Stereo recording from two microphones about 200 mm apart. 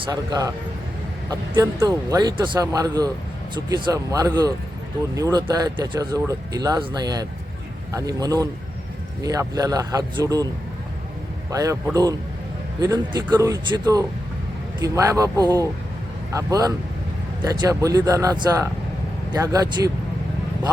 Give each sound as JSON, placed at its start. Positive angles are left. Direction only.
{"t": 0.0, "sound": "speech", "side_deg": -20}
{"t": 11.5, "sound": "speech", "side_deg": -15}